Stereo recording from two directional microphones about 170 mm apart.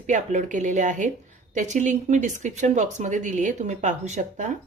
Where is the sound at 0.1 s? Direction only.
45° right (ahead or behind).